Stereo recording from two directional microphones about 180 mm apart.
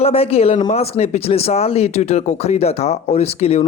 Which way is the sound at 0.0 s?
35° left (ahead or behind).